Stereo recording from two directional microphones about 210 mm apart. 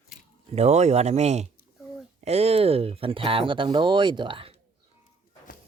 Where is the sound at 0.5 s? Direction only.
30° right (ahead or behind).